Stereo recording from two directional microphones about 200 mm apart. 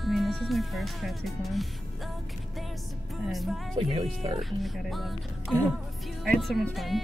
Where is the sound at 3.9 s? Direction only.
30° right (ahead or behind).